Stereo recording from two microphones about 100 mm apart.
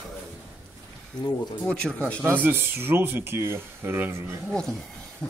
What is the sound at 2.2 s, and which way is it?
Speech, 15° right (ahead or behind).